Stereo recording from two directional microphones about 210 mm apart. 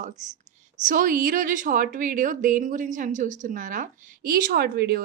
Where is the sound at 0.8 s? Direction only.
40° right (ahead or behind).